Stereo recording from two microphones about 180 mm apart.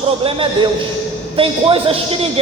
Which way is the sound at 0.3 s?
30° right (ahead or behind).